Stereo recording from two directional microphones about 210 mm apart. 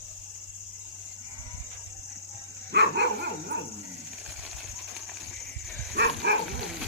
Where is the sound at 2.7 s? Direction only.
50° right (ahead or behind).